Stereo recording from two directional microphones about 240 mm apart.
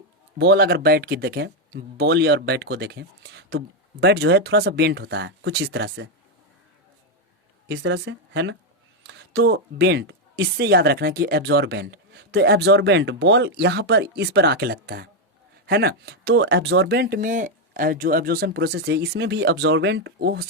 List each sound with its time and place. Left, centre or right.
0.3 s a woman's voice: right
7.7 s a woman's voice: right